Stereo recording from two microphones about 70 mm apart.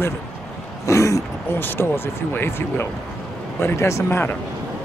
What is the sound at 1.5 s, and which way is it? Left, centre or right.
Speech, left.